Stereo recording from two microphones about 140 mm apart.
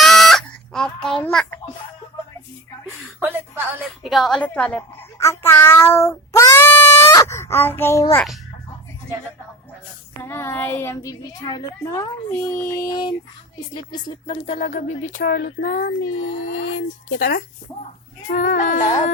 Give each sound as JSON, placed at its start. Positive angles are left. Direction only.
{"t": 0.0, "sound": "chicken", "side_deg": 0}
{"t": 3.2, "sound": "a sound", "side_deg": -15}
{"t": 4.0, "sound": "a woman's voice", "side_deg": 5}
{"t": 5.1, "sound": "child singing", "side_deg": 20}
{"t": 10.2, "sound": "speech", "side_deg": 15}
{"t": 13.7, "sound": "music", "side_deg": 35}
{"t": 14.6, "sound": "a sound", "side_deg": 60}
{"t": 18.3, "sound": "music", "side_deg": 65}